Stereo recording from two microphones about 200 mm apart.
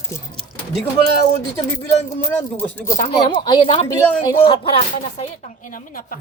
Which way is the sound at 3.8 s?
10° left (ahead or behind).